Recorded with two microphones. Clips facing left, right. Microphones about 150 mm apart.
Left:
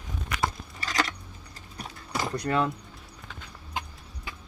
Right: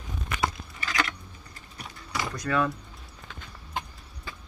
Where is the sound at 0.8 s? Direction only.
40° left (ahead or behind).